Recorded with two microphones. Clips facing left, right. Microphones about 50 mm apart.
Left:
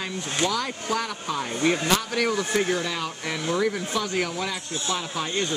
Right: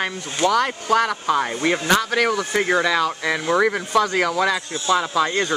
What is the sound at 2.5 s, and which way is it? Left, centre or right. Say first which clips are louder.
Speech: right 5 dB; right.